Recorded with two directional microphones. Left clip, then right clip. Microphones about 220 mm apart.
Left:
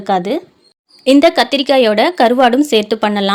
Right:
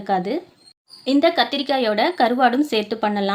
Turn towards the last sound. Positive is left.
turn(degrees=30)  # may be behind; listen again after turning